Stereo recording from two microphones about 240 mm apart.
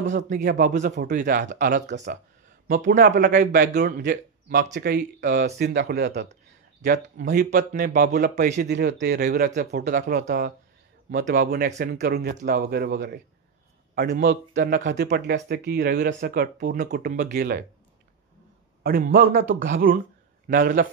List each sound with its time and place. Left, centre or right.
0.3 s speech: right
3.0 s speech: right
8.6 s speech: right
14.3 s speech: right
18.8 s speech: right
19.5 s speech: right
20.4 s speech: right